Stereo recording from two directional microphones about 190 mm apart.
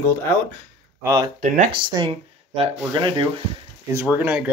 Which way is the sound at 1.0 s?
20° right (ahead or behind).